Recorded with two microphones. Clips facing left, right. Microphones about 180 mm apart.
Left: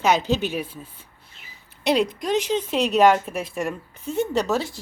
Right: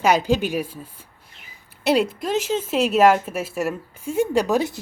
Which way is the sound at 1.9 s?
5° right (ahead or behind).